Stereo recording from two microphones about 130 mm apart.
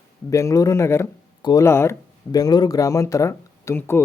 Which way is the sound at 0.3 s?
25° left (ahead or behind).